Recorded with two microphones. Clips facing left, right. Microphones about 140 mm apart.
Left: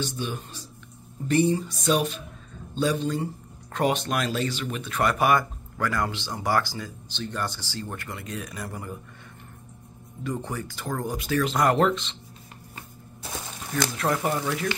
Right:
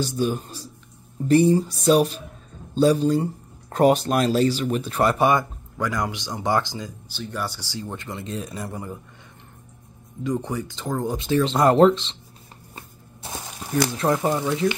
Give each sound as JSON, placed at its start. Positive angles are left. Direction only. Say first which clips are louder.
{"t": 0.0, "sound": "speech", "louder": "right 7 dB", "side_deg": -40}
{"t": 7.1, "sound": "speech", "louder": "even", "side_deg": -10}
{"t": 10.2, "sound": "speech", "louder": "right 5 dB", "side_deg": -20}
{"t": 12.7, "sound": "a sound", "louder": "right 2 dB", "side_deg": -25}
{"t": 13.9, "sound": "speech", "louder": "right 2 dB", "side_deg": -25}